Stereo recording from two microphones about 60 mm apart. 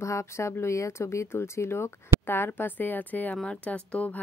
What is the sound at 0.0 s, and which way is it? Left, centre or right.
Speech, left.